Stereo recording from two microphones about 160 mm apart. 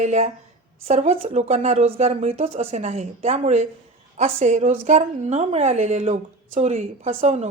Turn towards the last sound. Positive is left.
turn(degrees=-45)  # may be behind; listen again after turning